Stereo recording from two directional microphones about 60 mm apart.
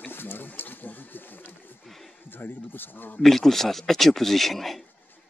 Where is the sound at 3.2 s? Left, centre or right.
Centre.